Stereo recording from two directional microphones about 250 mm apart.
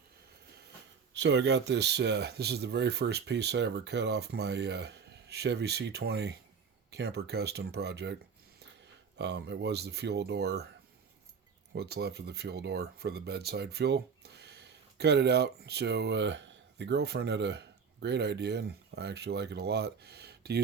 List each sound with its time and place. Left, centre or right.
1.1 s speech: right
9.1 s speech: right
11.7 s speech: right